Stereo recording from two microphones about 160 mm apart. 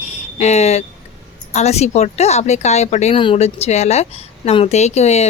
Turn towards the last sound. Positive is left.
turn(degrees=40)  # may be behind; listen again after turning